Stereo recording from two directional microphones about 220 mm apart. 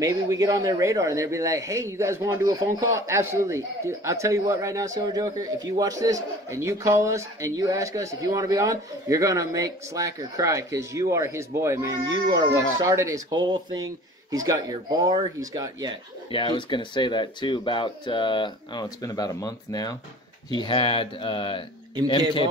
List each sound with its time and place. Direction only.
0.0 s speech: 15° right (ahead or behind)
16.3 s speech: 20° left (ahead or behind)